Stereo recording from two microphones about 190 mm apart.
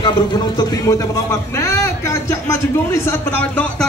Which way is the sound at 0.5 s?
15° left (ahead or behind).